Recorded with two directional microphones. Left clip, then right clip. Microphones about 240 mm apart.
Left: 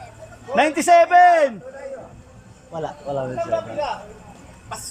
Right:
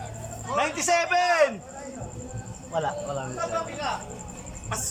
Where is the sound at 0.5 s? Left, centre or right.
Left.